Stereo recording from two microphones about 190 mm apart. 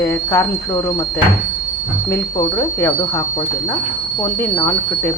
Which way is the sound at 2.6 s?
15° left (ahead or behind).